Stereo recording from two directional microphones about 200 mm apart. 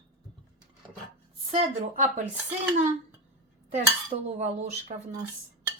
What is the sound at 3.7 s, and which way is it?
Dishes, 35° right (ahead or behind).